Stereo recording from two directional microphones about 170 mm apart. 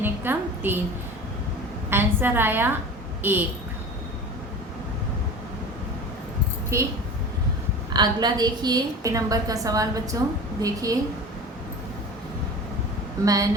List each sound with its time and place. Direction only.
0.0 s a woman's voice: 10° right (ahead or behind)
1.9 s a woman's voice: 10° right (ahead or behind)
6.7 s a woman's voice: 15° right (ahead or behind)
7.9 s a woman's voice: 25° right (ahead or behind)
13.2 s a woman's voice: 20° right (ahead or behind)